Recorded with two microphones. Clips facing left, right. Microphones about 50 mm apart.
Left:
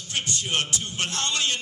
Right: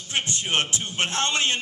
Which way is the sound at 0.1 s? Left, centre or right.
Right.